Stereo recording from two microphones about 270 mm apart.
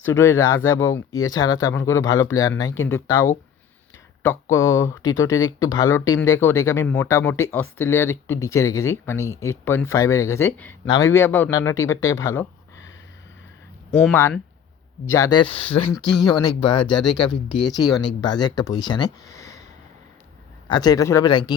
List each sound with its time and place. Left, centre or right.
0.0 s speech: centre
13.9 s speech: centre
15.9 s speech: centre
16.2 s speech: centre
16.8 s speech: centre
17.7 s speech: centre
20.7 s speech: centre